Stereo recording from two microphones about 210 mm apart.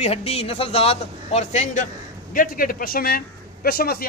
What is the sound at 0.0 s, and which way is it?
A man's voice, 30° left (ahead or behind).